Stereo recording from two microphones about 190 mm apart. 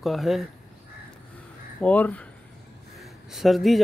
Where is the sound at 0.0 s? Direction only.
Centre (ahead or behind).